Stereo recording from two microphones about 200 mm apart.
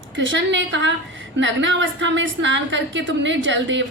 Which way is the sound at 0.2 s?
65° right (ahead or behind).